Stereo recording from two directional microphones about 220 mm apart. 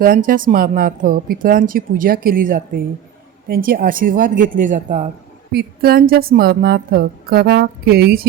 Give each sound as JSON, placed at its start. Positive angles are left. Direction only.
{"t": 0.0, "sound": "a woman's voice", "side_deg": -40}
{"t": 5.5, "sound": "a woman's voice", "side_deg": -45}